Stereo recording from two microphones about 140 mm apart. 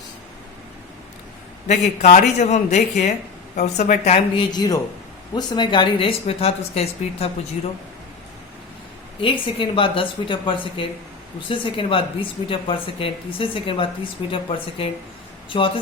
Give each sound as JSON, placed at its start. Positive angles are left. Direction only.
{"t": 1.6, "sound": "speech", "side_deg": 55}
{"t": 4.4, "sound": "speech", "side_deg": 30}
{"t": 9.2, "sound": "speech", "side_deg": 40}